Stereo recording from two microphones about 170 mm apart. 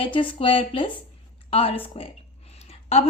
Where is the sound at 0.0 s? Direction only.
30° left (ahead or behind).